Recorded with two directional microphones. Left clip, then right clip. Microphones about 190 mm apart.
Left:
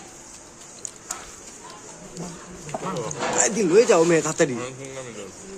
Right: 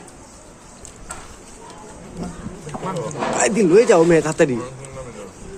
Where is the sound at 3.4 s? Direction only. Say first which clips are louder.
Right 4 dB; 10° right (ahead or behind).